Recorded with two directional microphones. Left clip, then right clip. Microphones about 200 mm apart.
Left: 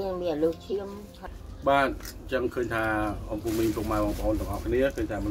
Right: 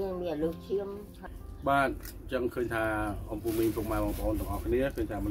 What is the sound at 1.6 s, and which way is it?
Speech, 25° right (ahead or behind).